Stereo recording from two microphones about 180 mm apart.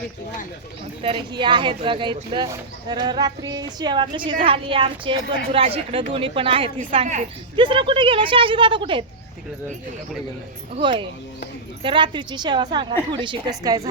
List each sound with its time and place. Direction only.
1.0 s a woman's voice: 30° right (ahead or behind)
7.5 s a woman's voice: 25° right (ahead or behind)
10.8 s a woman's voice: 25° right (ahead or behind)